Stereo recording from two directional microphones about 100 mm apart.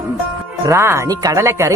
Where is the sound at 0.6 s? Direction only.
30° right (ahead or behind).